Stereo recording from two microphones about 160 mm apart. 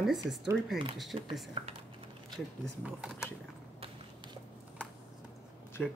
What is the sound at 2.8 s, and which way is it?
Speech, 5° right (ahead or behind).